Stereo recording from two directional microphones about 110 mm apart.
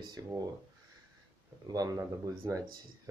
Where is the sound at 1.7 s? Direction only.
35° right (ahead or behind).